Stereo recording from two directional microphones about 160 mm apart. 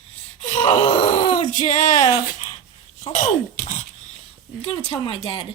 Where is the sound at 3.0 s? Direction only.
45° left (ahead or behind).